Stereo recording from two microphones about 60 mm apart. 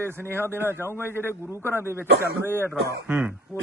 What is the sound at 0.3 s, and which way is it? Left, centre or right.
Speech, right.